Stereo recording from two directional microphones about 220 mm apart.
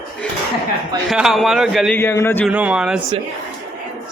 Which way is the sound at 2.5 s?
5° right (ahead or behind).